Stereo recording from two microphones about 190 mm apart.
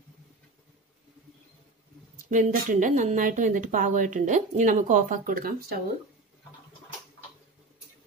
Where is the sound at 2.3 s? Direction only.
45° right (ahead or behind).